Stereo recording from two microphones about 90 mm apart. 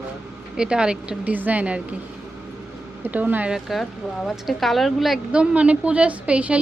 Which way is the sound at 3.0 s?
20° right (ahead or behind).